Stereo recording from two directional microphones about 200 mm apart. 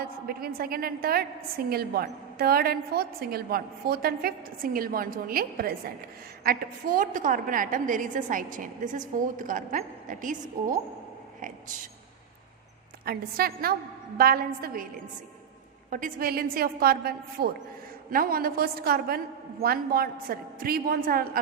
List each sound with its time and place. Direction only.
0.0 s a woman's voice: 50° right (ahead or behind)
13.1 s a woman's voice: 50° right (ahead or behind)
15.9 s a woman's voice: 40° right (ahead or behind)